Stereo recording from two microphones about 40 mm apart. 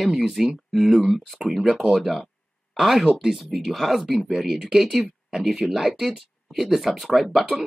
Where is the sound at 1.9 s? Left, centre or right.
Centre.